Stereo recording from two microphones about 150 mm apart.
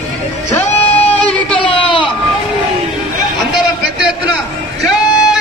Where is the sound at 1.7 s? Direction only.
35° left (ahead or behind).